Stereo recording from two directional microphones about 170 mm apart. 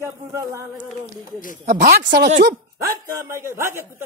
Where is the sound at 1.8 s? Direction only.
60° right (ahead or behind); by 2.5 s 85° right.